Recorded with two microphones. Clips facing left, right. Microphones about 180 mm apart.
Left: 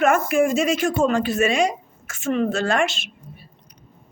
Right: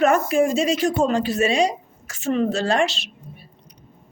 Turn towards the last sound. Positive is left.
turn(degrees=-35)  # may be behind; listen again after turning